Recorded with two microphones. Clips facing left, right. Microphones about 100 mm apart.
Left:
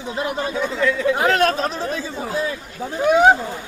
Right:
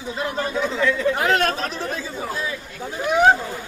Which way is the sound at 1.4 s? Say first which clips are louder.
Left 4 dB; 40° left (ahead or behind).